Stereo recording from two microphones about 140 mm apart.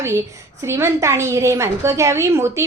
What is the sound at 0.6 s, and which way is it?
A woman's voice, 20° right (ahead or behind).